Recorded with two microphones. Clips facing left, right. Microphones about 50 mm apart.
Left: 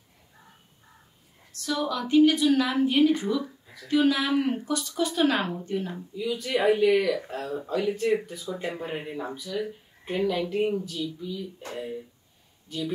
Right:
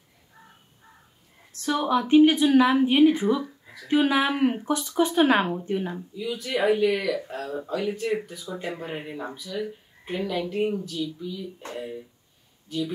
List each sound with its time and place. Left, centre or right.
1.6 s a woman's voice: right
6.2 s speech: centre
12.6 s speech: centre